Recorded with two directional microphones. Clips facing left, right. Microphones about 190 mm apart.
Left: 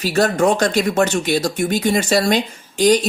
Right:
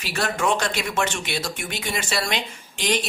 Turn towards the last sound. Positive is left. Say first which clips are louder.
# left 11 dB
turn(degrees=40)  # may be behind; listen again after turning